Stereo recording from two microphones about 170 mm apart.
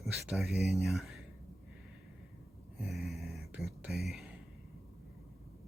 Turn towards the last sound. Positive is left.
turn(degrees=0)  # may be behind; listen again after turning